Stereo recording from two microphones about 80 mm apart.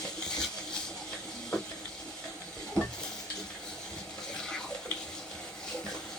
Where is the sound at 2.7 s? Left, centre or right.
Centre.